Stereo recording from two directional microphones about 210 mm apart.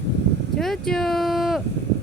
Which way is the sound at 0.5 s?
Centre (ahead or behind).